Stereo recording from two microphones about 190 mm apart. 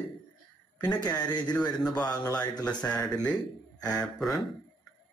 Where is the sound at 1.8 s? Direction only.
5° left (ahead or behind).